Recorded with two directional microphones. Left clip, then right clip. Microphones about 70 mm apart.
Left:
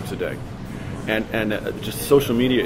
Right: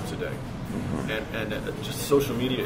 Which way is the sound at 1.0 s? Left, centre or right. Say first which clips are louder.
Left 11 dB; left.